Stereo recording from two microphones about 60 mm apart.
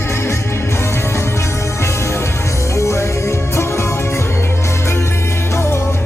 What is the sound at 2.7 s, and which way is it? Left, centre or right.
Music, left.